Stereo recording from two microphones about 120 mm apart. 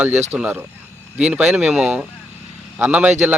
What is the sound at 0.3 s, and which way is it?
Speech, 15° right (ahead or behind).